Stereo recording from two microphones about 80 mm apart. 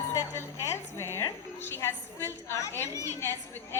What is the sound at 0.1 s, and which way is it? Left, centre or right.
Music, left.